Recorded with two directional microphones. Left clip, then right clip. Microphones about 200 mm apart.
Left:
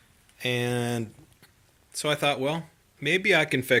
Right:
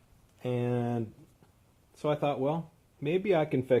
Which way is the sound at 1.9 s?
10° left (ahead or behind).